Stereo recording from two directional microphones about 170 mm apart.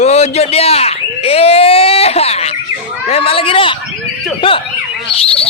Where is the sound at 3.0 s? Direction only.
35° left (ahead or behind).